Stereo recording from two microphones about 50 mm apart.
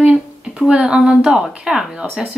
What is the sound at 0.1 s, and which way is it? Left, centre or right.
Speech, centre.